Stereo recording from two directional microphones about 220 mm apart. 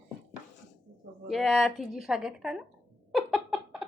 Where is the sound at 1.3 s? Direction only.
Centre (ahead or behind).